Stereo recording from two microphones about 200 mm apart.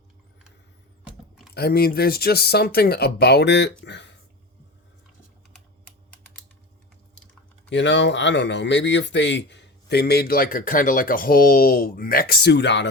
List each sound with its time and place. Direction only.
1.5 s speech: 50° left (ahead or behind)
7.7 s speech: 60° left (ahead or behind)